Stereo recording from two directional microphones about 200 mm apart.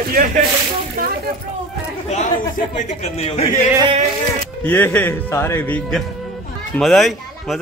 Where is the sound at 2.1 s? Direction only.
40° left (ahead or behind).